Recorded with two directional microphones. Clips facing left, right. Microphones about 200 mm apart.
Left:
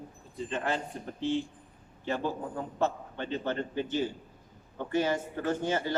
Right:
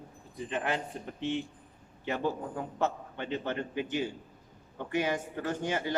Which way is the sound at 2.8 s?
15° right (ahead or behind).